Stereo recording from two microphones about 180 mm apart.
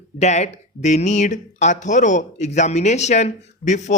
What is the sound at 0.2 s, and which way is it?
Speech, 40° left (ahead or behind).